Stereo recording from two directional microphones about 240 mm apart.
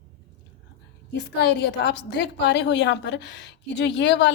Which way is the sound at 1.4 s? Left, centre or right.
Left.